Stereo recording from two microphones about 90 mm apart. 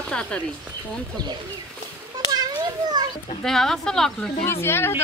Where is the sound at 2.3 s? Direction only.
50° right (ahead or behind).